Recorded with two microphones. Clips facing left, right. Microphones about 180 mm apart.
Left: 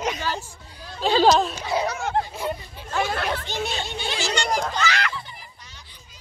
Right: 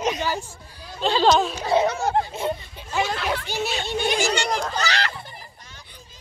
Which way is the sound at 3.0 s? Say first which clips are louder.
Left 1 dB; 50° left (ahead or behind).